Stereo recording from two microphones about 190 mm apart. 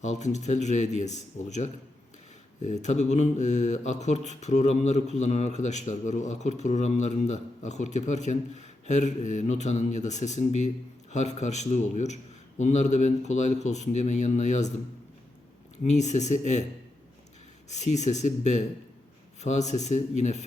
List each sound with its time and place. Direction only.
0.0 s mantra: 40° left (ahead or behind)
15.8 s mantra: 40° left (ahead or behind)
17.7 s mantra: 40° left (ahead or behind)